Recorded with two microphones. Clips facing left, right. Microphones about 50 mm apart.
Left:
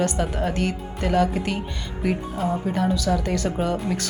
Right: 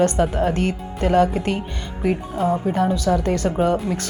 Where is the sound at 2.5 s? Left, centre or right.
Right.